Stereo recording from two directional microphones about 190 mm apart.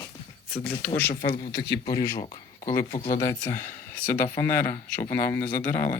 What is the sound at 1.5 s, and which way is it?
Speech, 55° left (ahead or behind).